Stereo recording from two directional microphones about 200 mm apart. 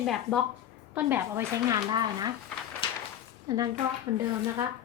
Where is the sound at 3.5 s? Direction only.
20° right (ahead or behind).